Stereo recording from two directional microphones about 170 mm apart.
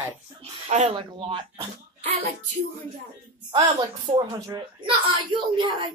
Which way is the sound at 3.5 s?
25° right (ahead or behind).